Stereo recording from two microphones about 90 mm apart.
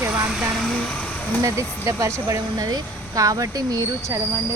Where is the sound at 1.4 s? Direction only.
30° right (ahead or behind).